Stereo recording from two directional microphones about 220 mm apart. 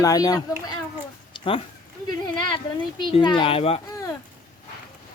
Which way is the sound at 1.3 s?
25° left (ahead or behind).